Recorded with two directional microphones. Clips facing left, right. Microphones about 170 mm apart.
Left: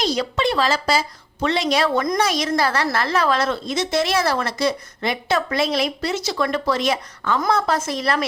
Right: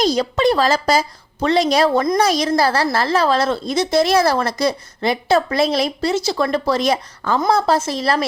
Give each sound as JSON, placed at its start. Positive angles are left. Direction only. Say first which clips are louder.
{"t": 0.0, "sound": "a woman's voice", "louder": "right 5 dB", "side_deg": -40}